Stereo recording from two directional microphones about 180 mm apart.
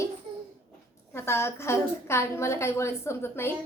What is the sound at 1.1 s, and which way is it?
A woman's voice, 15° left (ahead or behind).